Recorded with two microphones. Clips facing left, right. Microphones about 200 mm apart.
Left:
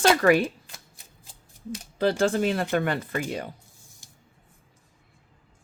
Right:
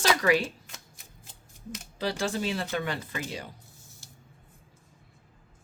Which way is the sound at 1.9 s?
55° left (ahead or behind).